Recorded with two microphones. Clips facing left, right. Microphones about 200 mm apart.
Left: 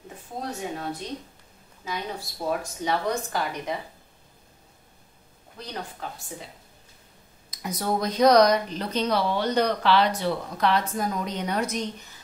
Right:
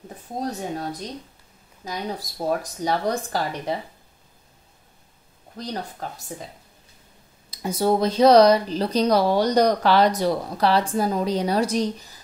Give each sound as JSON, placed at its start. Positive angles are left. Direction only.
{"t": 0.4, "sound": "speech", "side_deg": -40}
{"t": 5.6, "sound": "speech", "side_deg": -40}
{"t": 7.5, "sound": "speech", "side_deg": -30}